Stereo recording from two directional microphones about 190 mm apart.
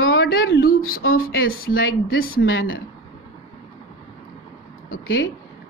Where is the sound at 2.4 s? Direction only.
75° left (ahead or behind).